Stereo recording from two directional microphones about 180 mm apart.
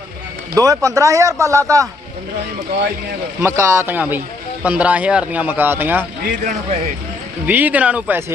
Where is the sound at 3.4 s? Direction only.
15° right (ahead or behind).